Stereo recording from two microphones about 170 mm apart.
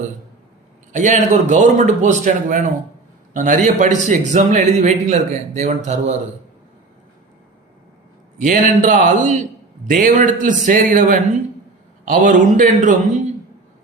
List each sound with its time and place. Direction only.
0.9 s speech: 45° right (ahead or behind)
8.4 s speech: 50° right (ahead or behind)